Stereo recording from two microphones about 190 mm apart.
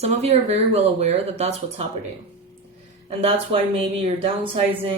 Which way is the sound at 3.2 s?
30° right (ahead or behind).